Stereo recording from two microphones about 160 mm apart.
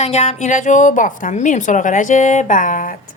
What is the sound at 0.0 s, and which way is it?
Speech, 45° left (ahead or behind).